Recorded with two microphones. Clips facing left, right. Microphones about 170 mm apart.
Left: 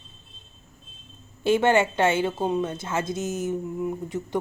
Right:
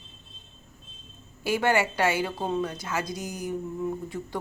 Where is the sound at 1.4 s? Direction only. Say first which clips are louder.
Left 5 dB; 25° left (ahead or behind).